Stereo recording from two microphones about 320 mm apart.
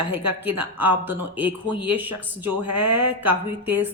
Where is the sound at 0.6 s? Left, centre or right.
Centre.